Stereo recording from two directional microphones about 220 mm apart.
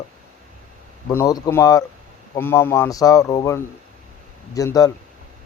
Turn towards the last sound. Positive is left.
turn(degrees=15)  # may be behind; listen again after turning